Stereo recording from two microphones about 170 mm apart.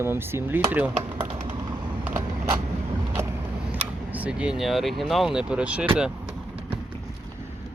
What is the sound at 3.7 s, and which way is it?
Speech, 10° right (ahead or behind).